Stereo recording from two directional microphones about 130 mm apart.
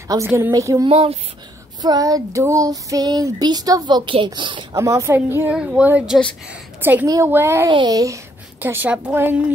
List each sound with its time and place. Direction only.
0.1 s a woman's voice: 20° right (ahead or behind)
0.8 s speech: 45° right (ahead or behind)
1.8 s child singing: 30° right (ahead or behind)
4.7 s a woman's voice: 25° right (ahead or behind)
7.7 s a woman's voice: 30° right (ahead or behind)
8.5 s a woman's voice: 15° right (ahead or behind)